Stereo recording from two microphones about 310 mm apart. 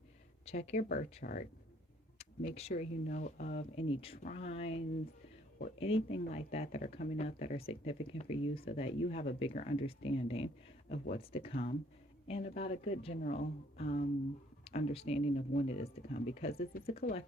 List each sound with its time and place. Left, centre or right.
0.4 s speech: left
10.9 s speech: left
11.2 s speech: centre